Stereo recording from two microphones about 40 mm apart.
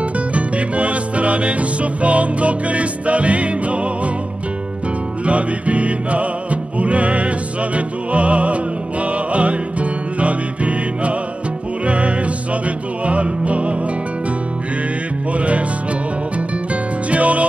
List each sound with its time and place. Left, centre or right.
0.3 s music: right
5.2 s music: right
15.3 s music: right
17.1 s music: right